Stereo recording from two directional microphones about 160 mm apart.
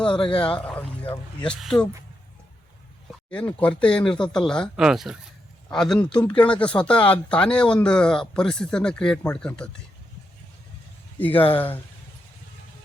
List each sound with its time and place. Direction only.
0.3 s speech: 5° left (ahead or behind)
3.1 s speech: 5° left (ahead or behind)
11.2 s speech: 10° left (ahead or behind)